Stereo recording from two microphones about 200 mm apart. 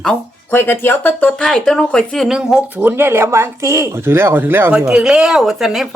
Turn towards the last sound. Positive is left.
turn(degrees=0)  # may be behind; listen again after turning